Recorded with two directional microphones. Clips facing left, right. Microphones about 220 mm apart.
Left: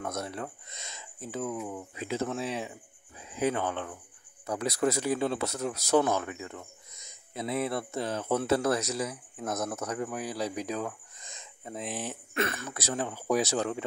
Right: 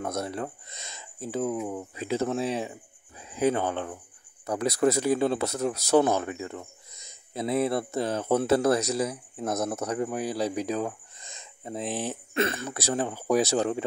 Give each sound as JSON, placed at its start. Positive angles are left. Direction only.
{"t": 0.0, "sound": "speech", "side_deg": -35}